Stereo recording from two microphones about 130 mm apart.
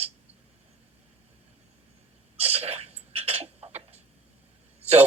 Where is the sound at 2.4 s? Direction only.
50° right (ahead or behind).